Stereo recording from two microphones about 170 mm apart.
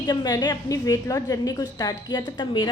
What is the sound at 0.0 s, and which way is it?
Speech, 25° left (ahead or behind).